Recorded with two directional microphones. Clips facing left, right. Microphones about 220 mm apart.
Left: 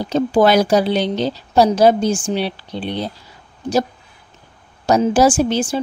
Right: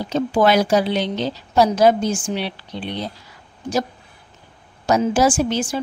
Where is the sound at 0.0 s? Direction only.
35° left (ahead or behind).